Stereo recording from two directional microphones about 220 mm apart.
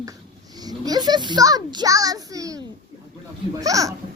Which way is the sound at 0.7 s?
20° right (ahead or behind).